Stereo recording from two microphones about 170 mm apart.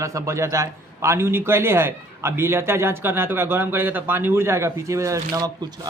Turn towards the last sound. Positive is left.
turn(degrees=-25)  # may be behind; listen again after turning